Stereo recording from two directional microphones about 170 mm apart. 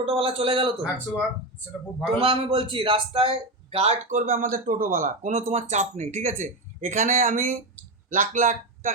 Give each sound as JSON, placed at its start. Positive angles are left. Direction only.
{"t": 0.0, "sound": "a man's voice", "side_deg": -35}
{"t": 2.1, "sound": "speech", "side_deg": -35}